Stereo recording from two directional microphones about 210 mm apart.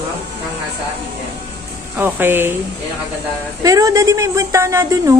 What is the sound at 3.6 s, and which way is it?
A woman's voice, 15° right (ahead or behind).